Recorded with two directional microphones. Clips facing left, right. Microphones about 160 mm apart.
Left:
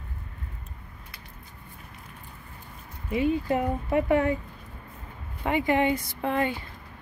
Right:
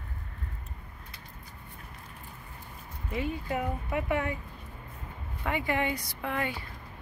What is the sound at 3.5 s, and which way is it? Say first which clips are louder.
Speech: left 6 dB; 35° left (ahead or behind).